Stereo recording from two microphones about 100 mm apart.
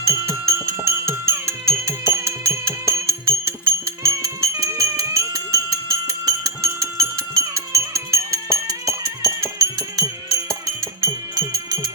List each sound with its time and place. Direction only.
0.1 s music: 25° right (ahead or behind)